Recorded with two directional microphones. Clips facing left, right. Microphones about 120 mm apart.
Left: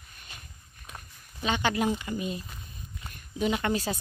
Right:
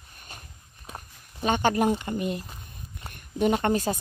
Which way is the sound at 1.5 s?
50° right (ahead or behind).